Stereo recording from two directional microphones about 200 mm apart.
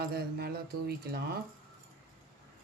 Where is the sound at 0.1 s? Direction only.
55° right (ahead or behind).